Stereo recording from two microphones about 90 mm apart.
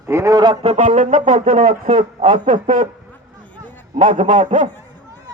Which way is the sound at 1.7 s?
80° right.